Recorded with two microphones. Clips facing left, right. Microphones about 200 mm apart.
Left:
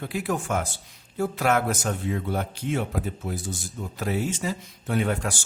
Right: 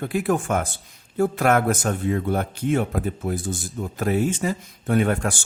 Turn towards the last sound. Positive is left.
turn(degrees=-50)  # may be behind; listen again after turning